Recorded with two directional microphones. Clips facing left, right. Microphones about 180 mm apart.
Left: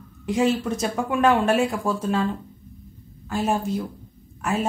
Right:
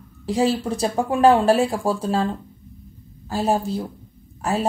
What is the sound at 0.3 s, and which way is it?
Speech, 35° right (ahead or behind).